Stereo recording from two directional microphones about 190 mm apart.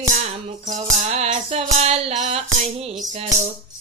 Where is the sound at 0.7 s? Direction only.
35° right (ahead or behind).